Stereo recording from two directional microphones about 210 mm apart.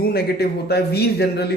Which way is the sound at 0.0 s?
50° left (ahead or behind).